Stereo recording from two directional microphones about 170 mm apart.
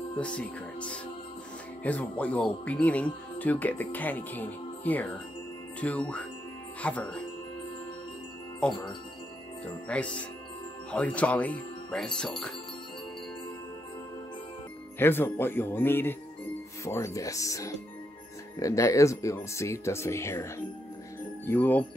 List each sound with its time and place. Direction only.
0.2 s speech: 5° left (ahead or behind)
8.6 s speech: 5° left (ahead or behind)
9.8 s speech: 5° left (ahead or behind)
15.0 s speech: 15° left (ahead or behind)